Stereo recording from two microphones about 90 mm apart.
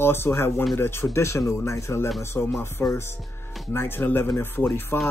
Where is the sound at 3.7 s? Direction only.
25° left (ahead or behind).